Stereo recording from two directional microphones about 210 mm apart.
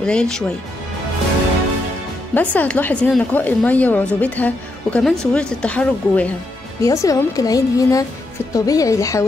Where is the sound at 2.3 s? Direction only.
5° left (ahead or behind).